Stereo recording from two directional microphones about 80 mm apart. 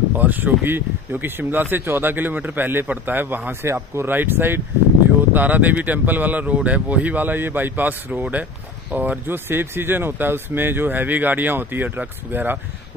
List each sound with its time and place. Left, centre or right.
0.1 s speech: right